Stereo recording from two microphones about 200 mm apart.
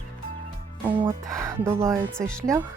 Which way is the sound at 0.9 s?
20° right (ahead or behind).